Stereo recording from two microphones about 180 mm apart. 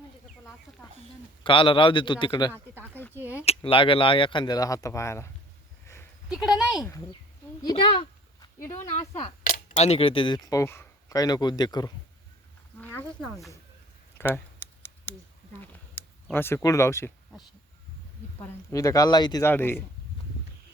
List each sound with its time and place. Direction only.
1.5 s speech: 30° left (ahead or behind)
6.2 s speech: 5° right (ahead or behind)
7.6 s a sound: 25° left (ahead or behind)
8.6 s speech: 15° left (ahead or behind)
8.9 s speech: 35° left (ahead or behind)
9.4 s a sound: 50° left (ahead or behind)
9.7 s speech: 35° left (ahead or behind)
12.8 s speech: 10° left (ahead or behind)
14.2 s a sound: 10° left (ahead or behind)
18.3 s speech: 15° left (ahead or behind)